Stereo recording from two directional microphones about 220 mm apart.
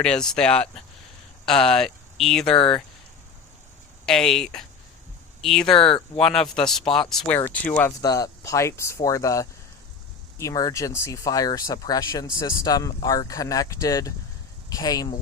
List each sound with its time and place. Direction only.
0.0 s speech: 5° left (ahead or behind)
2.6 s speech: 20° left (ahead or behind)
4.0 s speech: centre (ahead or behind)
5.7 s speech: 20° left (ahead or behind)
6.1 s speech: 5° left (ahead or behind)